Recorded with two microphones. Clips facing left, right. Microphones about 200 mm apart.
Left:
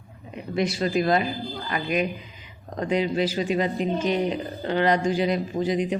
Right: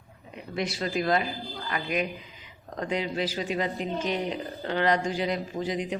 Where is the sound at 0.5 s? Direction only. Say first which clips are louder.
Left 6 dB; 15° left (ahead or behind).